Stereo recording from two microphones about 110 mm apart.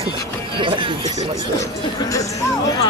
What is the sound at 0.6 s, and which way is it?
Speech, 50° right (ahead or behind).